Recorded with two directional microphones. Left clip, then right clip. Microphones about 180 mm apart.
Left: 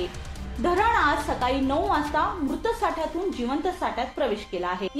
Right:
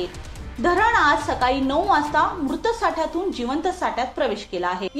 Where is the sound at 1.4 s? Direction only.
15° right (ahead or behind).